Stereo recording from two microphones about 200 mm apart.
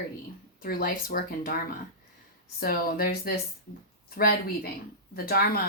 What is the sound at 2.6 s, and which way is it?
Speech, 50° left (ahead or behind).